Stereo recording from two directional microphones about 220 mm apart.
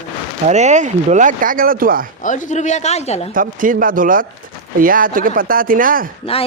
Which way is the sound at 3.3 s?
40° right (ahead or behind).